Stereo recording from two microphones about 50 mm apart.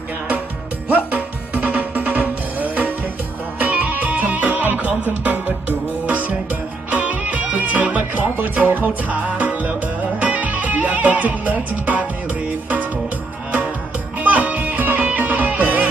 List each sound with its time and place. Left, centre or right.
1.1 s music: right
14.2 s music: right